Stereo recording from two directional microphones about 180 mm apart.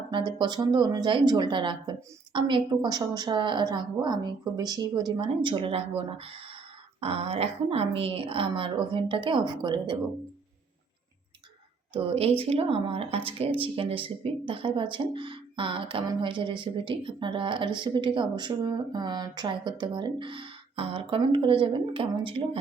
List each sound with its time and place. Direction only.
0.1 s speech: 25° right (ahead or behind)
11.9 s speech: 30° right (ahead or behind)